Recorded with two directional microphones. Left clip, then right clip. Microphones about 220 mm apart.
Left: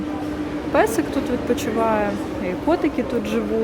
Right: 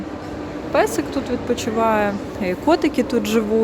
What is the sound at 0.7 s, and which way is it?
A woman's voice, centre (ahead or behind).